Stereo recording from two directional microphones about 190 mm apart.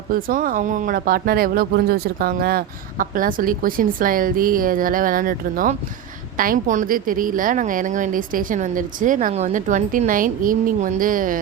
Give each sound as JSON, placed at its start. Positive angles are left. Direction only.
{"t": 0.1, "sound": "speech", "side_deg": -45}